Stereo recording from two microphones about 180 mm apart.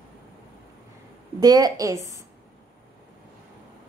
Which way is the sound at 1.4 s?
20° right (ahead or behind).